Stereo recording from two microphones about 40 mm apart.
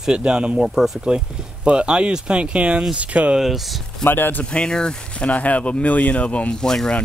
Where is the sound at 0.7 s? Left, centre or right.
Centre.